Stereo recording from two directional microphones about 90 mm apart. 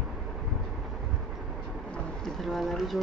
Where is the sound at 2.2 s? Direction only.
5° left (ahead or behind).